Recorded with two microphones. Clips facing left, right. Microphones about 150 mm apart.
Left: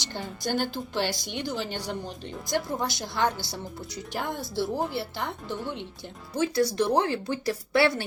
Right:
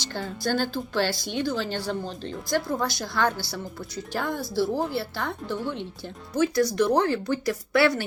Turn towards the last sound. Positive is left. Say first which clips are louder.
# right 2 dB
turn(degrees=25)  # may be behind; listen again after turning